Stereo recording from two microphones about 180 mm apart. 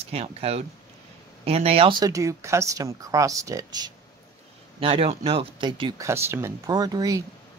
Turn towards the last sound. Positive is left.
turn(degrees=-20)  # may be behind; listen again after turning